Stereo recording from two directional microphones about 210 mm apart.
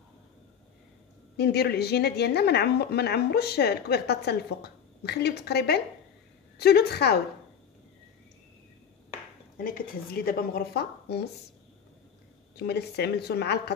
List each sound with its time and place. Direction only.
1.3 s a woman's voice: 50° left (ahead or behind)
9.6 s a woman's voice: 45° left (ahead or behind)
12.5 s a woman's voice: 50° left (ahead or behind)